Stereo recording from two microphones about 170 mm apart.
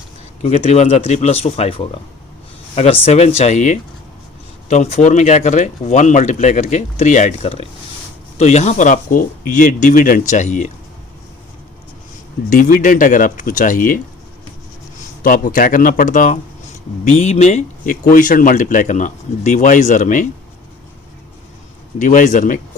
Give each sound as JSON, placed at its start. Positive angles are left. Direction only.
{"t": 0.4, "sound": "speech", "side_deg": 40}
{"t": 12.5, "sound": "speech", "side_deg": 55}
{"t": 15.2, "sound": "speech", "side_deg": 55}
{"t": 21.9, "sound": "speech", "side_deg": 50}